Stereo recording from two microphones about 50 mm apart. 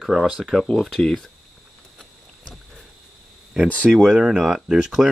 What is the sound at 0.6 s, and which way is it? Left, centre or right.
Speech, centre.